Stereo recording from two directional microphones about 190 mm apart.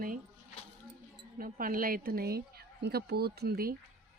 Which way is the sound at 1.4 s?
45° right (ahead or behind).